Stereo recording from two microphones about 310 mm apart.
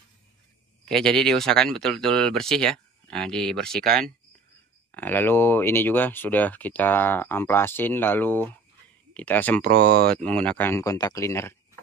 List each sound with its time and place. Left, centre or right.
0.8 s speech: centre
4.9 s speech: centre
9.7 s speech: right
10.1 s speech: centre